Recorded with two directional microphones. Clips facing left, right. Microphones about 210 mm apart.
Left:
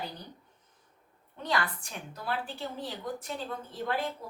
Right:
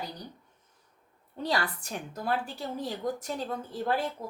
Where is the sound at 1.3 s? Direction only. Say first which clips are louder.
Right 2 dB; 35° right (ahead or behind).